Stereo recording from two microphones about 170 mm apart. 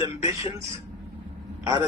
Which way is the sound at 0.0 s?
20° right (ahead or behind).